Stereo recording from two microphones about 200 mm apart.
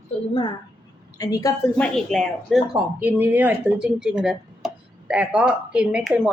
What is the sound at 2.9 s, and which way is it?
Speech, 10° right (ahead or behind).